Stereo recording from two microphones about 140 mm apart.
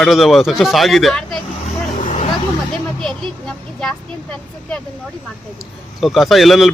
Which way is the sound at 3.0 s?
5° left (ahead or behind).